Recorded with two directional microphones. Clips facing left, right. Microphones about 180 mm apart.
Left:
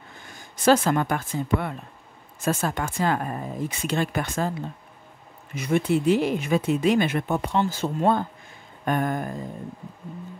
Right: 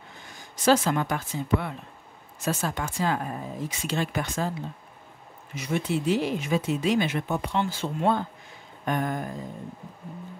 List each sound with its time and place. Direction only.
0.7 s speech: 50° left (ahead or behind)
5.5 s speech: 55° left (ahead or behind)